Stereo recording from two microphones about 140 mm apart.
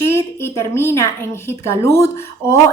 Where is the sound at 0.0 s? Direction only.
20° left (ahead or behind).